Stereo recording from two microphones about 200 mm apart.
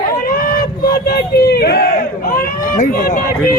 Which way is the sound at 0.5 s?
50° left (ahead or behind).